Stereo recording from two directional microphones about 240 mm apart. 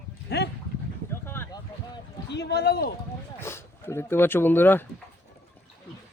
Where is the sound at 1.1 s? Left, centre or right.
Centre.